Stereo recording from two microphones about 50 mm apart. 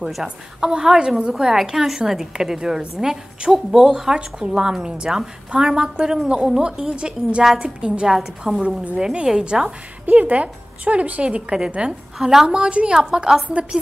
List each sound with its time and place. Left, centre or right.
0.1 s a woman's voice: centre
12.2 s a woman's voice: centre
12.4 s a woman's voice: right
13.5 s a woman's voice: right